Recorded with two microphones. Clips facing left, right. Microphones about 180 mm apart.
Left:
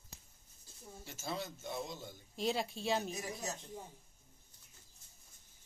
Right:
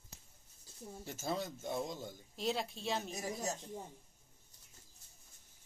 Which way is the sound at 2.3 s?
Centre (ahead or behind).